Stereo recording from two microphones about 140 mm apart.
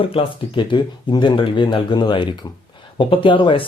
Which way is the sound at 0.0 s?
40° left (ahead or behind).